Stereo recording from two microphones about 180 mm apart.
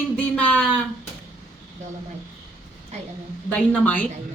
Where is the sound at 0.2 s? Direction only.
5° left (ahead or behind).